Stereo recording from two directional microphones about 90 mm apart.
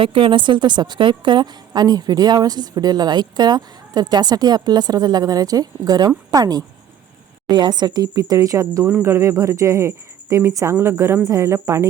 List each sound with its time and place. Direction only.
0.0 s a woman's voice: 75° right (ahead or behind); by 8.9 s 40° right (ahead or behind)
8.9 s speech: 30° right (ahead or behind)